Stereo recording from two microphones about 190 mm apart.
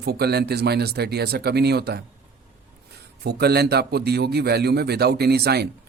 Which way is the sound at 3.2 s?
60° right (ahead or behind).